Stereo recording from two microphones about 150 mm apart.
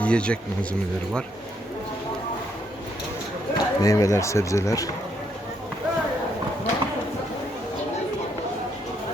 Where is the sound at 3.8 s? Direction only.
25° left (ahead or behind).